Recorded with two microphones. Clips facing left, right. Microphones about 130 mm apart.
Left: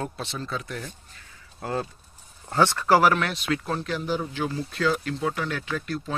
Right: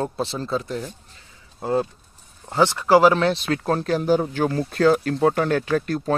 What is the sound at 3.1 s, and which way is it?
Speech, 30° right (ahead or behind).